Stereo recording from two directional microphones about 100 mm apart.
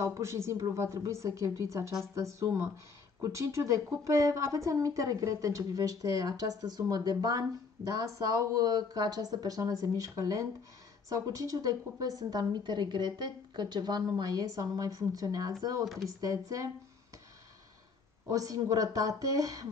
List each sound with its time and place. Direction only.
0.0 s a woman's voice: 30° right (ahead or behind)
15.8 s speech: centre (ahead or behind)
16.1 s speech: 35° right (ahead or behind)
18.3 s speech: 35° right (ahead or behind)